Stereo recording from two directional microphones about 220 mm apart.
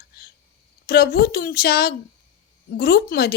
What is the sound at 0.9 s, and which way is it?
A woman's voice, 45° left (ahead or behind).